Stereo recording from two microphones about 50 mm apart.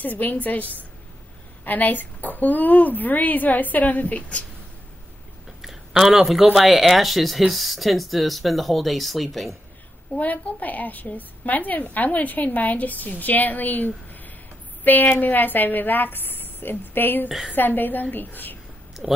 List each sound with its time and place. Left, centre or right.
0.0 s a woman's voice: left
5.6 s a sound: centre
6.5 s speech: centre
10.1 s a woman's voice: left
19.0 s speech: centre